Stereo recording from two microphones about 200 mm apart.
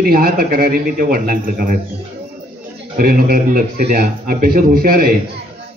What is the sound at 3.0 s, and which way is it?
A man's voice, 45° right (ahead or behind).